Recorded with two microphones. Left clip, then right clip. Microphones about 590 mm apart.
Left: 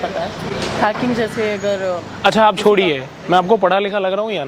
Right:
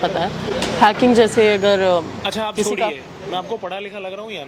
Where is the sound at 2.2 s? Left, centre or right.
Left.